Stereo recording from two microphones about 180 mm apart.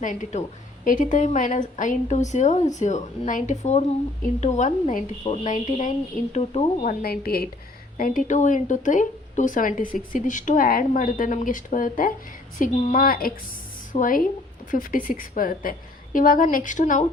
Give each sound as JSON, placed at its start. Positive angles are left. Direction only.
{"t": 0.0, "sound": "speech", "side_deg": 45}
{"t": 7.0, "sound": "a woman's voice", "side_deg": 60}